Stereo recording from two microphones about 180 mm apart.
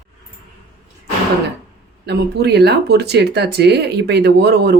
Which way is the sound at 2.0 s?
65° right (ahead or behind).